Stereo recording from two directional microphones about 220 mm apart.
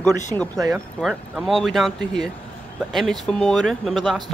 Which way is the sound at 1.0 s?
Centre (ahead or behind).